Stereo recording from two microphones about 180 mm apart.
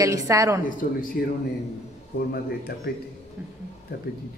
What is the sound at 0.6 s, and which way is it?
A man's voice, 50° left (ahead or behind).